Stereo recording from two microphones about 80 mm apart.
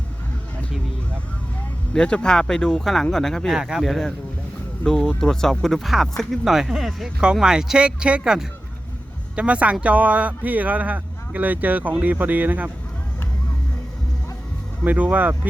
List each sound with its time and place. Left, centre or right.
1.9 s speech: centre; by 12.7 s right
14.8 s speech: centre